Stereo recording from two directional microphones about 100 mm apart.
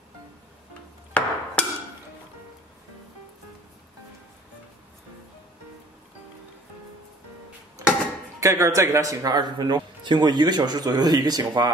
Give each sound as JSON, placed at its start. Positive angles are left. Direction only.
{"t": 1.1, "sound": "hammer", "side_deg": 15}
{"t": 8.4, "sound": "a man's voice", "side_deg": -30}